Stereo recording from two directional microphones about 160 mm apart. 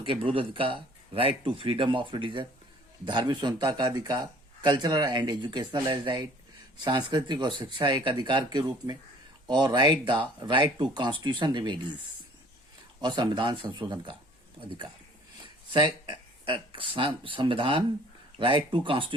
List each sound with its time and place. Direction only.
0.0 s speech: 35° right (ahead or behind)
13.0 s speech: 30° right (ahead or behind)
15.7 s speech: 30° right (ahead or behind)